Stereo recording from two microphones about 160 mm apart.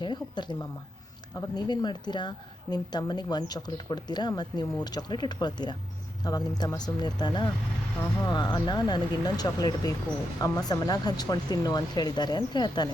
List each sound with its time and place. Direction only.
0.0 s a woman's voice: 30° left (ahead or behind)